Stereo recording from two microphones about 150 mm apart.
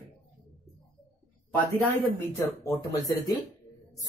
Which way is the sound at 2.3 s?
20° left (ahead or behind).